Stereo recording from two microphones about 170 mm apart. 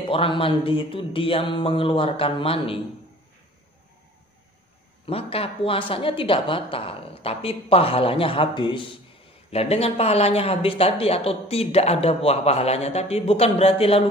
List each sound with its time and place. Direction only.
0.1 s speech: 30° left (ahead or behind)
5.0 s speech: 35° left (ahead or behind)